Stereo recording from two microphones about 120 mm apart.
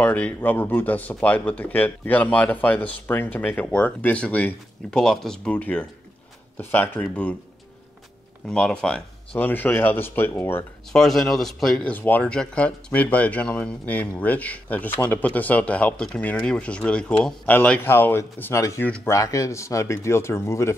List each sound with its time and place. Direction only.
0.0 s speech: 10° left (ahead or behind)
8.5 s speech: 5° left (ahead or behind)
10.9 s speech: 5° left (ahead or behind); by 20.7 s 20° left (ahead or behind)